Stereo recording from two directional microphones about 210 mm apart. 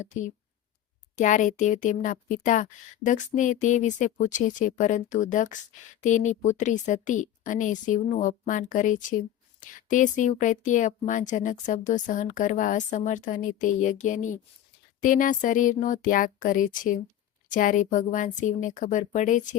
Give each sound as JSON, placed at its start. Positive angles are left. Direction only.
{"t": 0.0, "sound": "a woman's voice", "side_deg": 35}